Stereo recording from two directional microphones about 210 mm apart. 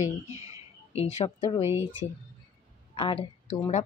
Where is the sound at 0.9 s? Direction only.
25° left (ahead or behind).